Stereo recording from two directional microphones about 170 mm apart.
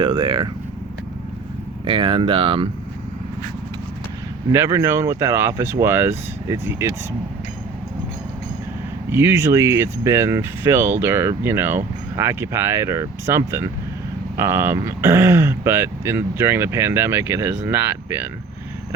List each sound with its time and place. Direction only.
0.0 s speech: 25° right (ahead or behind)
1.9 s speech: 30° right (ahead or behind)
4.5 s speech: 15° right (ahead or behind)
9.0 s speech: 15° right (ahead or behind)